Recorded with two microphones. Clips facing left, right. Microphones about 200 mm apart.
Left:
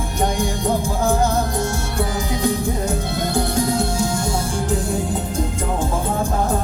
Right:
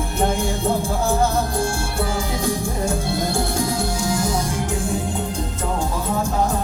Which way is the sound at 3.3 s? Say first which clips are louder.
Left 3 dB; 25° left (ahead or behind).